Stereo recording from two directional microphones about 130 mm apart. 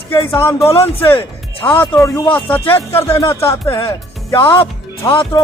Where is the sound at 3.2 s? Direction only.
20° left (ahead or behind).